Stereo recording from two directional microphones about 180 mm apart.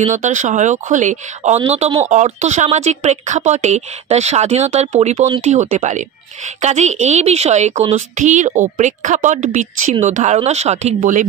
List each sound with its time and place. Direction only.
0.0 s a woman's voice: 40° right (ahead or behind)